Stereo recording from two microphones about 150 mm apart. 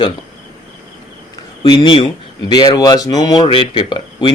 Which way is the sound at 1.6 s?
30° left (ahead or behind).